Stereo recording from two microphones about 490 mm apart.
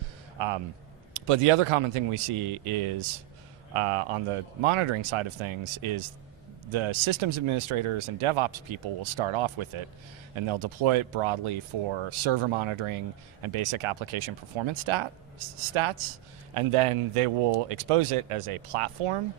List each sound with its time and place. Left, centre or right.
0.3 s speech: right
1.1 s speech: right
16.6 s speech: right